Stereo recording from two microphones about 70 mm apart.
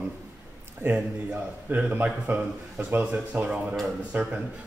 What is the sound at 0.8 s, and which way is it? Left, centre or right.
A man's voice, right.